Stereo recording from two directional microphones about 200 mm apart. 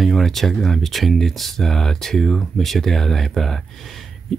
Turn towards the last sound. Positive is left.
turn(degrees=0)  # may be behind; listen again after turning